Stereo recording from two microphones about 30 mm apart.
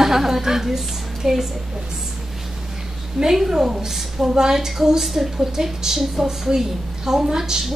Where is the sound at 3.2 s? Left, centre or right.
Centre.